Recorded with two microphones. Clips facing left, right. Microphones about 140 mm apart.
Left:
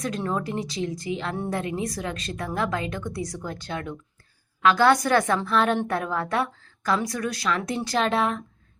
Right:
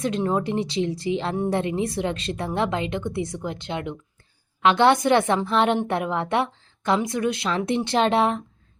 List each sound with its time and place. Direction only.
0.0 s a woman's voice: 25° right (ahead or behind)